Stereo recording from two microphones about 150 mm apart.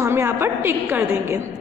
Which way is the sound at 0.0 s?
15° right (ahead or behind).